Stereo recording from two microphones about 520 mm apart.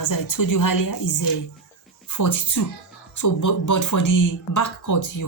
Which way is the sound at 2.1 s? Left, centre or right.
Left.